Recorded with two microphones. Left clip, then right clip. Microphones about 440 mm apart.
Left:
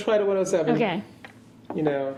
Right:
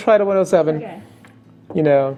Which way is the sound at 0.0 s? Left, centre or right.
Right.